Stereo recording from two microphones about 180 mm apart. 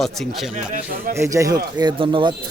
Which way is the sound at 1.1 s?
15° right (ahead or behind).